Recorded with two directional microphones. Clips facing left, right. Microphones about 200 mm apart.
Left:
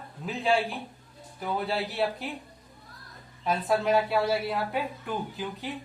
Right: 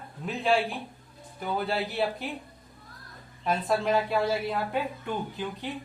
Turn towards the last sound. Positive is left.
turn(degrees=5)  # may be behind; listen again after turning